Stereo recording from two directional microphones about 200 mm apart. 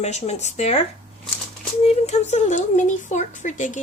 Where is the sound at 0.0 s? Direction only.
35° left (ahead or behind).